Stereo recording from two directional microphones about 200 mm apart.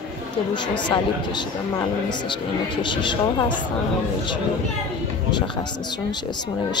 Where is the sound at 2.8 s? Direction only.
25° left (ahead or behind).